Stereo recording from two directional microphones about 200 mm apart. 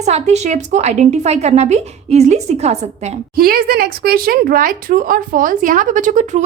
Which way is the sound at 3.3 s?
50° right (ahead or behind).